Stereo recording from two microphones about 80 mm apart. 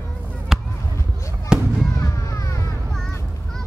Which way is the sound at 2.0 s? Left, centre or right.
Left.